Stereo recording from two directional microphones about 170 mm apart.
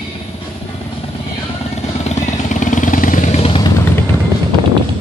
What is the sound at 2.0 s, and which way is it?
Vehicle, 45° left (ahead or behind).